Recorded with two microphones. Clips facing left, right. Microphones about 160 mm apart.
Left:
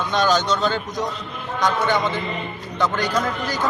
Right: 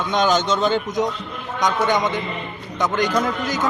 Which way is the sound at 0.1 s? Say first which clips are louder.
Right 1 dB; 20° right (ahead or behind).